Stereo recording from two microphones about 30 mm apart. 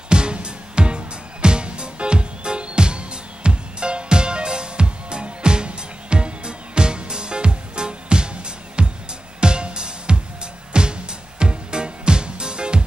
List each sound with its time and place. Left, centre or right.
0.1 s music: right